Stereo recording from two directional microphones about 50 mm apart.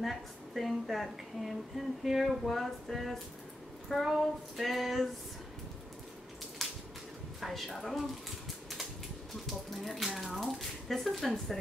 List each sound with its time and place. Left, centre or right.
0.0 s speech: centre
6.6 s a sound: centre
7.3 s speech: centre
9.5 s speech: centre